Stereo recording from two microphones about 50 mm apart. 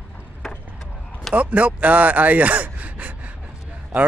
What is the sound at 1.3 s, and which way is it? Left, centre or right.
Speech, right.